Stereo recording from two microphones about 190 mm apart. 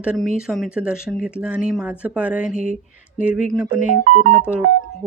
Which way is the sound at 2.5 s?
45° left (ahead or behind).